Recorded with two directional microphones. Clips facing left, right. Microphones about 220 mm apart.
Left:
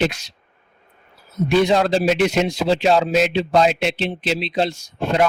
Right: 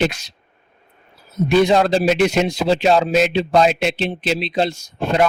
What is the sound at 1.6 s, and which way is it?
Speech, 45° right (ahead or behind).